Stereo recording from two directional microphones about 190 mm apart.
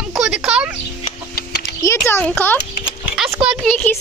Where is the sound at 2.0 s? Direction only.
5° left (ahead or behind).